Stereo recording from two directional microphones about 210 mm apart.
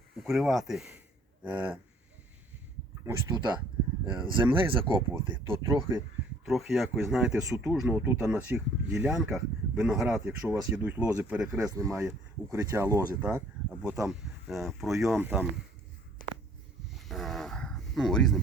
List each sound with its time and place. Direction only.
0.2 s speech: centre (ahead or behind)
3.1 s speech: 15° right (ahead or behind)
5.3 s speech: 10° right (ahead or behind)
6.4 s speech: centre (ahead or behind)
13.2 s a sound: 10° right (ahead or behind)
14.1 s speech: centre (ahead or behind)
16.9 s cattle: centre (ahead or behind)